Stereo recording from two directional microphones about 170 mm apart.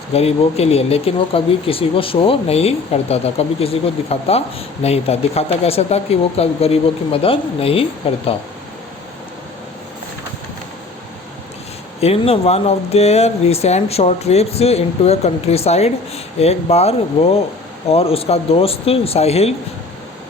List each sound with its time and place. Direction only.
0.1 s speech: 35° left (ahead or behind)
11.9 s speech: 35° left (ahead or behind)